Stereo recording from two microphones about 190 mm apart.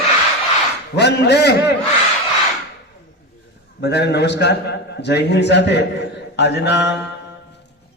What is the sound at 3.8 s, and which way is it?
A man's voice, 60° left (ahead or behind).